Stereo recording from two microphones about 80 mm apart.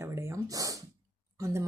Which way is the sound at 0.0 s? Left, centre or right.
Right.